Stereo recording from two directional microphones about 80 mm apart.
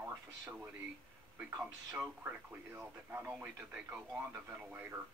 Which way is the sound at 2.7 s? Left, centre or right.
Right.